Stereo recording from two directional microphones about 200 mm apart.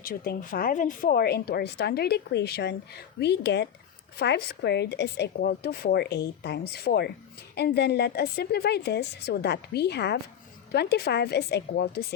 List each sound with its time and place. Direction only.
0.0 s a woman's voice: 45° left (ahead or behind)